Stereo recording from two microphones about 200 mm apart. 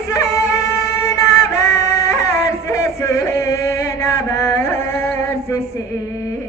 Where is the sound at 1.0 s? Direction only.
15° left (ahead or behind).